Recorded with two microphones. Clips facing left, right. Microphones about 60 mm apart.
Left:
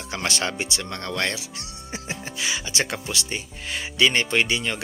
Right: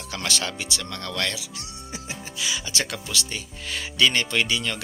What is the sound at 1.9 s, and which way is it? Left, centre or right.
Music, left.